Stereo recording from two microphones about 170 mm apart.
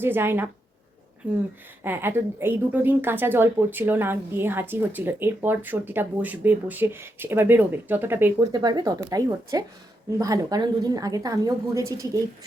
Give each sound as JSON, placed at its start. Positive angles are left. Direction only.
{"t": 0.0, "sound": "a woman's voice", "side_deg": -15}
{"t": 1.8, "sound": "a woman's voice", "side_deg": -10}
{"t": 8.5, "sound": "a woman's voice", "side_deg": -25}